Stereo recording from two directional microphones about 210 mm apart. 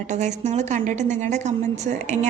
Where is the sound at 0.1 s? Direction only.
35° right (ahead or behind).